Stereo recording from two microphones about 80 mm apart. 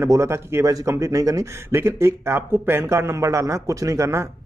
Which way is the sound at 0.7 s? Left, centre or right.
Right.